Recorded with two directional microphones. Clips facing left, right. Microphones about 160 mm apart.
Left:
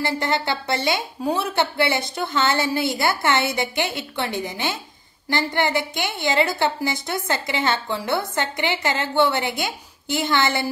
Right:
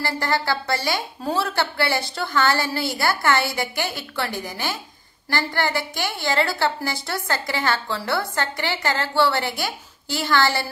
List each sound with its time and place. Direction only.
0.0 s a woman's voice: 20° left (ahead or behind)